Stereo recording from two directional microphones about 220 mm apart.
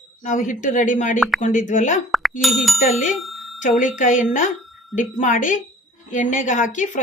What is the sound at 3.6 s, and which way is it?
Speech, 35° left (ahead or behind).